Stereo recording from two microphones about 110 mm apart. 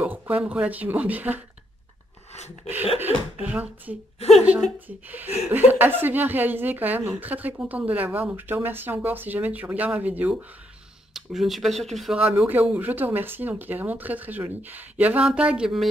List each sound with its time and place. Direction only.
0.0 s speech: 10° right (ahead or behind)
2.3 s speech: 85° left
3.0 s speech: 15° right (ahead or behind)
11.1 s speech: centre (ahead or behind)
12.2 s speech: 10° right (ahead or behind)